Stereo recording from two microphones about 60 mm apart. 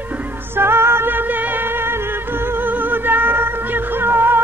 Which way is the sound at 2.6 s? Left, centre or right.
Right.